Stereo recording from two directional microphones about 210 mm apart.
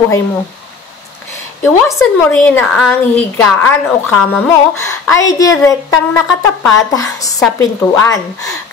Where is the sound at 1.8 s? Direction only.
5° left (ahead or behind).